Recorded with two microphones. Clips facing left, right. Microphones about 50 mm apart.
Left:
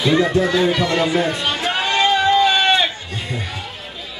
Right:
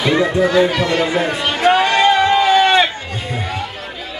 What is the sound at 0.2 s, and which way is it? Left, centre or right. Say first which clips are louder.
Speech: right 3 dB; right.